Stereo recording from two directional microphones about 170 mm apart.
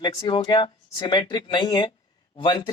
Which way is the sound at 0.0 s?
25° left (ahead or behind).